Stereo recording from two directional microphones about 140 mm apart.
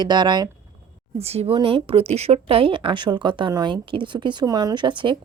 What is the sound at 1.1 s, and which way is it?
A woman's voice, 45° right (ahead or behind).